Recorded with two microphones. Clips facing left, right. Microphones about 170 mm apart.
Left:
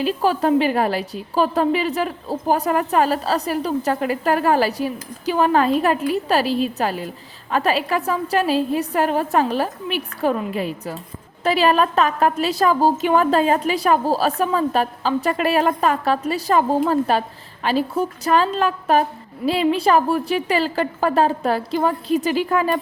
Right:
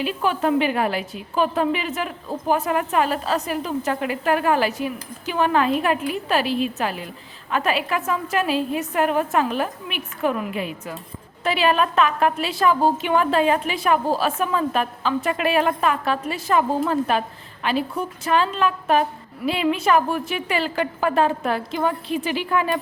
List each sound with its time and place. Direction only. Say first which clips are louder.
0.0 s a woman's voice: left 3 dB; 35° left (ahead or behind)